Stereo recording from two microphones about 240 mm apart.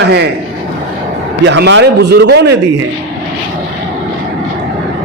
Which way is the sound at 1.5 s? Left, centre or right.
Right.